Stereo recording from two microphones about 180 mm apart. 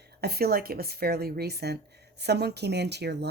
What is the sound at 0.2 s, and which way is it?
Speech, 60° right (ahead or behind).